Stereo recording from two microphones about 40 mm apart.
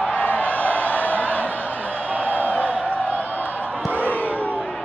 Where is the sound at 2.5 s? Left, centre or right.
Left.